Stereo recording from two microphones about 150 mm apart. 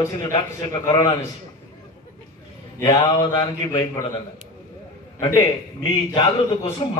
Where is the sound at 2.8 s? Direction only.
25° left (ahead or behind).